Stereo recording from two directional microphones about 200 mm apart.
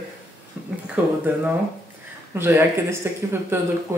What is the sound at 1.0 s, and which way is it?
Speech, 10° right (ahead or behind).